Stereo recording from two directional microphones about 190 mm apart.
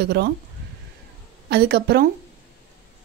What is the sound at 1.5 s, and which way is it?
Speech, 60° right (ahead or behind).